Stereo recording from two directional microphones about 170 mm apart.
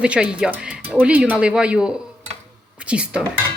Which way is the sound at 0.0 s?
5° right (ahead or behind).